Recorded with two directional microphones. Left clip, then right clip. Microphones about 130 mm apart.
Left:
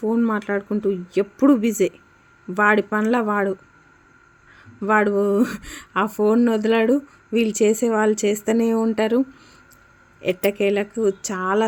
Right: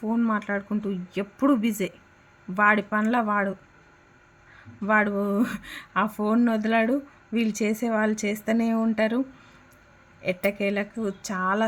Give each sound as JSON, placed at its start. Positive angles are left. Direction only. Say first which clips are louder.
{"t": 0.0, "sound": "speech", "louder": "left 5 dB", "side_deg": 40}
{"t": 4.8, "sound": "speech", "louder": "left 5 dB", "side_deg": 40}
{"t": 10.2, "sound": "speech", "louder": "left 6 dB", "side_deg": 40}